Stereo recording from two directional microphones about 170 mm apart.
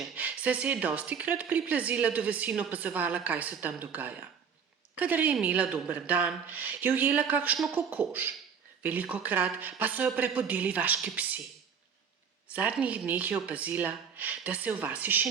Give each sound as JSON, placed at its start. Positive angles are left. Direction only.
{"t": 0.0, "sound": "speech", "side_deg": -10}
{"t": 12.5, "sound": "speech", "side_deg": -10}